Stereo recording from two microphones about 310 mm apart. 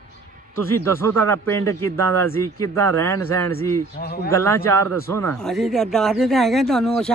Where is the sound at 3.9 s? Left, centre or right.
Left.